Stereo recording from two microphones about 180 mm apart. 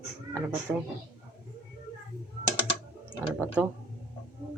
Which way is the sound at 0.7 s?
10° right (ahead or behind).